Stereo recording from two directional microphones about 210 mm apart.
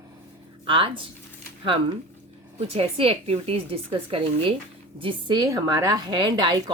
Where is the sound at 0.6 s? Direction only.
25° right (ahead or behind).